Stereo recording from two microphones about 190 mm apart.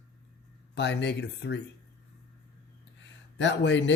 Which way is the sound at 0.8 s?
65° left (ahead or behind).